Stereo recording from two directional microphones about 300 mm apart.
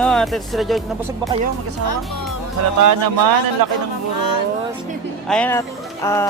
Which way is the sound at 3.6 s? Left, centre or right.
Right.